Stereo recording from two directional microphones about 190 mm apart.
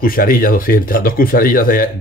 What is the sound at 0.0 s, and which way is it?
Speech, 50° left (ahead or behind).